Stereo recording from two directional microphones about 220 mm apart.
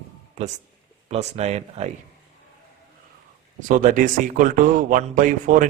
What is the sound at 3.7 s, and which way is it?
Speech, 35° right (ahead or behind).